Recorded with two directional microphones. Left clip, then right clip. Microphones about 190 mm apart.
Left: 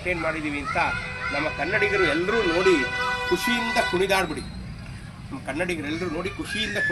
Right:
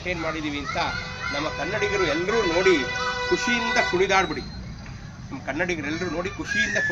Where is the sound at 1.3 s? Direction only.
40° left (ahead or behind).